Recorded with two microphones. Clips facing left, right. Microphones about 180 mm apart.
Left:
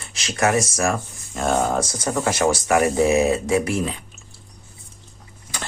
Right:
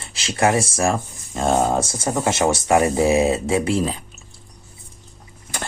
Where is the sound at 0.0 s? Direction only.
30° right (ahead or behind).